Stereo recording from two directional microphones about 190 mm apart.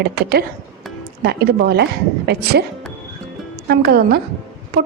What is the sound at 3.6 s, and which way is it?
Speech, 55° right (ahead or behind).